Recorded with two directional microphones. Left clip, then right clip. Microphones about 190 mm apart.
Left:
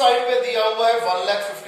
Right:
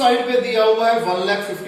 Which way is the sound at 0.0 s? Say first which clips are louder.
Right 1 dB; 20° left (ahead or behind).